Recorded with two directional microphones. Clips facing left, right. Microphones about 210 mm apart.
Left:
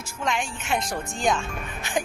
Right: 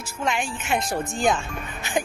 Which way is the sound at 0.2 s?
5° right (ahead or behind).